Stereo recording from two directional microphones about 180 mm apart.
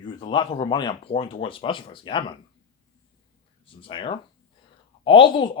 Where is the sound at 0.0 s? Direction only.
25° left (ahead or behind).